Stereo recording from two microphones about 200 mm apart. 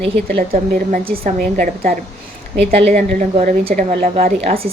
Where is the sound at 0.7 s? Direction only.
45° right (ahead or behind).